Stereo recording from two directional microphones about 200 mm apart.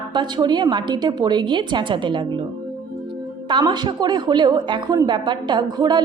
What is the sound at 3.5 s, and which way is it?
A woman's voice, 20° right (ahead or behind).